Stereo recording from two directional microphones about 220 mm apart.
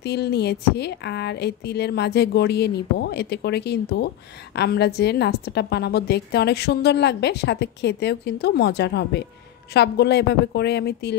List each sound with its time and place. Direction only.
0.0 s a woman's voice: 50° left (ahead or behind)